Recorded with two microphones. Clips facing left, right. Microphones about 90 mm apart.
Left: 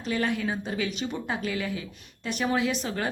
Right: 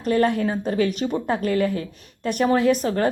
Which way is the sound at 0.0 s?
50° right (ahead or behind).